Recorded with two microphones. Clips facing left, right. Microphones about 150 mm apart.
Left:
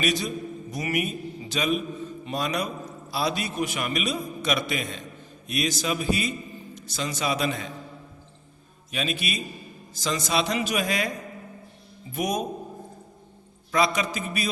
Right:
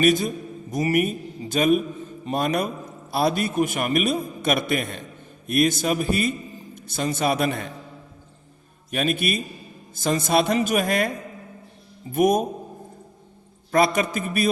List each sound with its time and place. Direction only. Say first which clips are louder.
0.0 s a man's voice: right 7 dB; 50° right (ahead or behind)
8.9 s a man's voice: right 6 dB; 50° right (ahead or behind)
12.1 s a man's voice: right 8 dB; 50° right (ahead or behind)
13.7 s a man's voice: right 4 dB; 50° right (ahead or behind)